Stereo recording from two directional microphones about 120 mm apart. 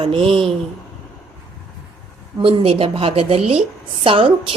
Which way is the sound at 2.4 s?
50° right (ahead or behind).